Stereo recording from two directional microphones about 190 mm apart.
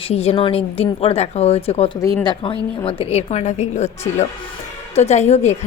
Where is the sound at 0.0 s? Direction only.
30° left (ahead or behind).